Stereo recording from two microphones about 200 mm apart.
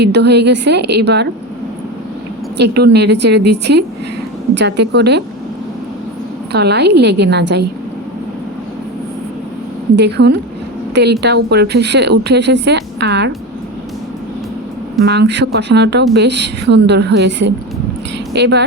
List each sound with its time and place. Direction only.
0.0 s speech: 55° right (ahead or behind)
2.6 s speech: 55° right (ahead or behind)
6.5 s speech: 55° right (ahead or behind)
9.9 s speech: 55° right (ahead or behind)
15.0 s speech: 55° right (ahead or behind)